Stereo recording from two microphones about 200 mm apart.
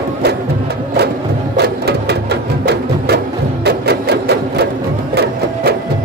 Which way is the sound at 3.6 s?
55° right (ahead or behind).